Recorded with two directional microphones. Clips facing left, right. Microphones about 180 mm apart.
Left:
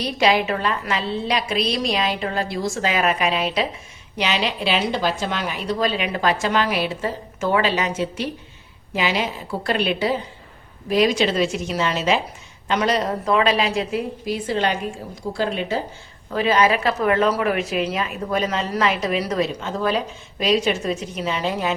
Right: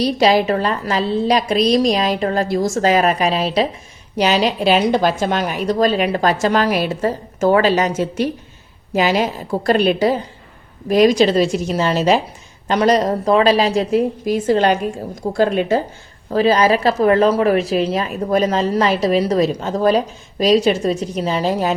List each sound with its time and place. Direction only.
0.0 s a woman's voice: 35° right (ahead or behind)
16.3 s speech: 35° right (ahead or behind)